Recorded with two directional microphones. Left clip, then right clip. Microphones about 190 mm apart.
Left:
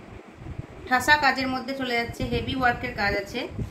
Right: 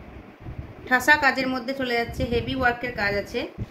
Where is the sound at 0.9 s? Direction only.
55° right (ahead or behind).